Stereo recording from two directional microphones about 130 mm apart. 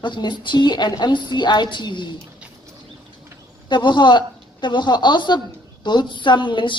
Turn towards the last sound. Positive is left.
turn(degrees=40)  # may be behind; listen again after turning